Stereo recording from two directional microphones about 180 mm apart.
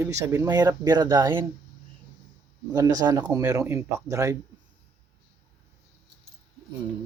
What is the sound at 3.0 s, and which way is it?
Speech, 20° right (ahead or behind).